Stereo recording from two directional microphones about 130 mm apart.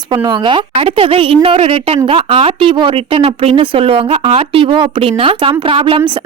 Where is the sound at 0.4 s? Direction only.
40° right (ahead or behind).